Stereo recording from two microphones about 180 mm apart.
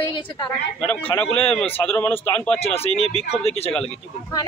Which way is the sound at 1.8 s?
10° left (ahead or behind).